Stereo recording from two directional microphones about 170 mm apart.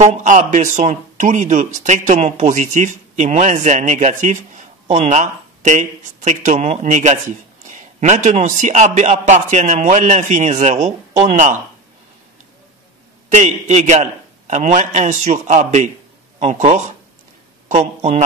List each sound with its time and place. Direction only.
0.0 s speech: 45° right (ahead or behind)
13.3 s a man's voice: 45° right (ahead or behind)